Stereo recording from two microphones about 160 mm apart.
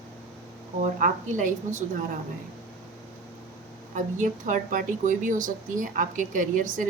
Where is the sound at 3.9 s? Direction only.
55° right (ahead or behind).